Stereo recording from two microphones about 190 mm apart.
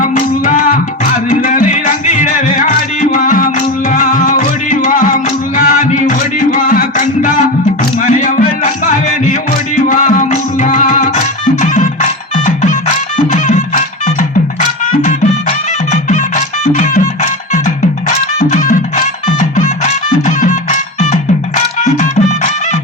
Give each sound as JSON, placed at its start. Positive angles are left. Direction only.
{"t": 0.0, "sound": "music", "side_deg": 45}
{"t": 9.9, "sound": "music", "side_deg": 40}
{"t": 13.3, "sound": "music", "side_deg": 40}
{"t": 18.3, "sound": "music", "side_deg": 40}